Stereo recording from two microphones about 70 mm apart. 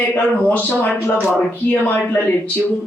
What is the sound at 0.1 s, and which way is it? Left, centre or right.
A woman's voice, left.